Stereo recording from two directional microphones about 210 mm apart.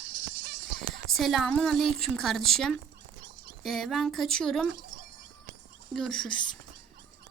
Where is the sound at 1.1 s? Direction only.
Centre (ahead or behind).